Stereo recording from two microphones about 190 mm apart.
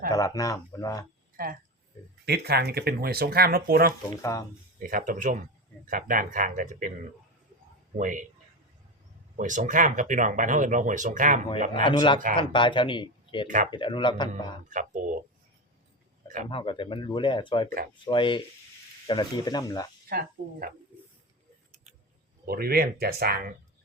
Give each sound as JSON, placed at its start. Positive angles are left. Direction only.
{"t": 0.1, "sound": "speech", "side_deg": 20}
{"t": 2.2, "sound": "speech", "side_deg": -55}
{"t": 4.2, "sound": "speech", "side_deg": 15}
{"t": 4.8, "sound": "speech", "side_deg": -45}
{"t": 7.9, "sound": "speech", "side_deg": -40}
{"t": 9.4, "sound": "speech", "side_deg": -40}
{"t": 11.7, "sound": "speech", "side_deg": 25}
{"t": 14.7, "sound": "speech", "side_deg": -40}
{"t": 16.5, "sound": "speech", "side_deg": 25}
{"t": 20.1, "sound": "speech", "side_deg": -50}
{"t": 22.4, "sound": "speech", "side_deg": -55}